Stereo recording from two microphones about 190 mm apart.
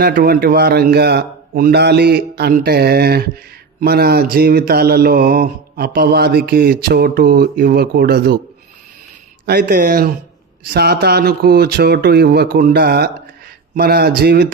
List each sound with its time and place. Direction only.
0.0 s a man's voice: 50° right (ahead or behind)
3.8 s mantra: 55° right (ahead or behind)
9.5 s mantra: 55° right (ahead or behind)
10.6 s a man's voice: 55° right (ahead or behind)